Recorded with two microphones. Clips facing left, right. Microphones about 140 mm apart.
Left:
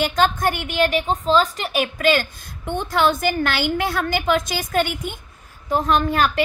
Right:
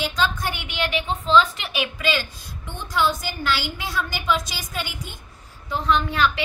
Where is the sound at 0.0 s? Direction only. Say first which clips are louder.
Left 6 dB; 55° left (ahead or behind).